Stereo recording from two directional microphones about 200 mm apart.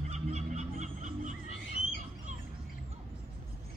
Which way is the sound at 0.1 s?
35° right (ahead or behind).